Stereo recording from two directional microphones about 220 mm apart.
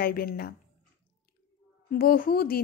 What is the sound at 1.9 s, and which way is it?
Speech, 40° left (ahead or behind).